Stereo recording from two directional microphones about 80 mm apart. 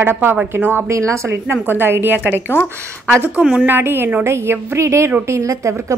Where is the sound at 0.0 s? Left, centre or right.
Right.